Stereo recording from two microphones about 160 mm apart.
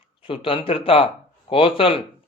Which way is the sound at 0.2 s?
35° left (ahead or behind).